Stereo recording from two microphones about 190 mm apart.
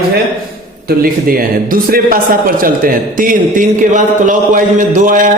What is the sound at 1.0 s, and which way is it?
A man's voice, 50° right (ahead or behind).